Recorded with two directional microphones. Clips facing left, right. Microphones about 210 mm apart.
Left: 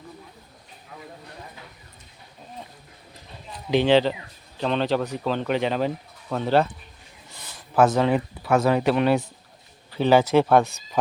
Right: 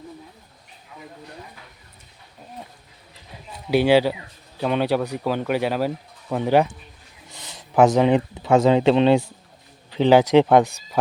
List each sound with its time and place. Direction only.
3.7 s speech: 10° right (ahead or behind)